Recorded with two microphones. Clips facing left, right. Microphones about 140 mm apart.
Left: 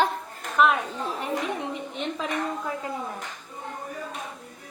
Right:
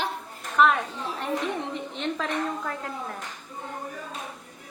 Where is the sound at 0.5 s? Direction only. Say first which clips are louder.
Even; centre (ahead or behind).